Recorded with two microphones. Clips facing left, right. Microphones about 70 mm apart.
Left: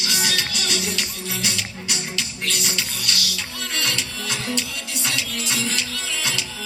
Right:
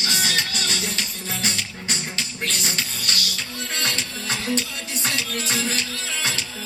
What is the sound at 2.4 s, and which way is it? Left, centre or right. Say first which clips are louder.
Speech: even; right.